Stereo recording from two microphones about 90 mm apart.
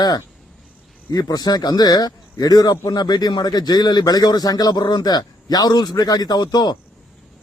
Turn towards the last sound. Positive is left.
turn(degrees=50)  # may be behind; listen again after turning